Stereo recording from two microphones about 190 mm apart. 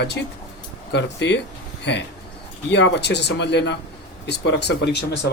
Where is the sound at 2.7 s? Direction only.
65° left (ahead or behind).